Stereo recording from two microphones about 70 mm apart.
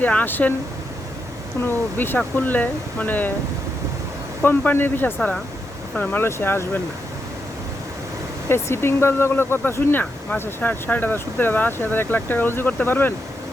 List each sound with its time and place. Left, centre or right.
0.0 s speech: left
1.6 s speech: left
4.4 s speech: left
8.4 s speech: left